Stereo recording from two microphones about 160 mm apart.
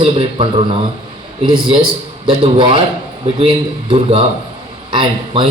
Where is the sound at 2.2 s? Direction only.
35° right (ahead or behind).